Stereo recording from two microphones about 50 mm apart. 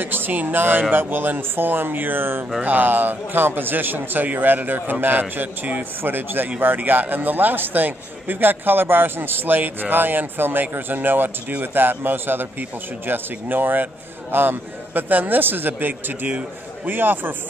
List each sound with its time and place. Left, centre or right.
0.0 s speech: right
2.6 s a man's voice: right